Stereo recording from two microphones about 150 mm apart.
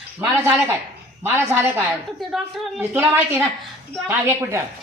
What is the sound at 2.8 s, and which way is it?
A woman's voice, 15° right (ahead or behind).